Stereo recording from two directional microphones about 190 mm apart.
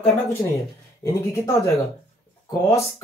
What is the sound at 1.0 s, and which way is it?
Speech, 15° left (ahead or behind).